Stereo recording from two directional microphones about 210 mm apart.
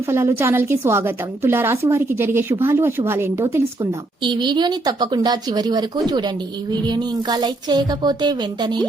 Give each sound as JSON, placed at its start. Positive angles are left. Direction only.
{"t": 0.1, "sound": "a woman's voice", "side_deg": -15}